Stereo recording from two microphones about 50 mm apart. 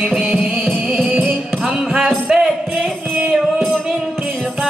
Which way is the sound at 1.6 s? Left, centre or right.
Centre.